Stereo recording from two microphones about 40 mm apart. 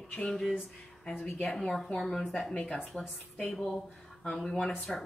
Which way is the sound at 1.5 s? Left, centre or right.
Centre.